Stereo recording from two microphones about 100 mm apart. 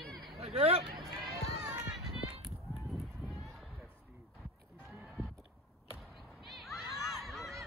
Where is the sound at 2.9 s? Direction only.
Centre (ahead or behind).